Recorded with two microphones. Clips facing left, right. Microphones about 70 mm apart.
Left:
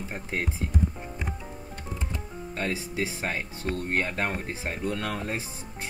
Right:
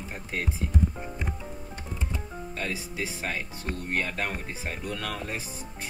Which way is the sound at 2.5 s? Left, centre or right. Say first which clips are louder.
Left 4 dB; left.